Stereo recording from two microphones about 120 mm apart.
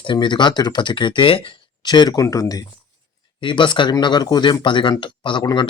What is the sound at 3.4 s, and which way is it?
Speech, 40° left (ahead or behind).